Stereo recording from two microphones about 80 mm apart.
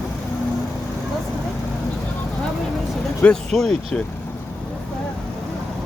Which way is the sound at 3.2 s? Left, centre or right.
Centre.